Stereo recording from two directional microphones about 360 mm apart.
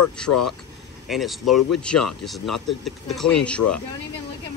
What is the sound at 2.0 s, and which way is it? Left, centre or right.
Speech, left.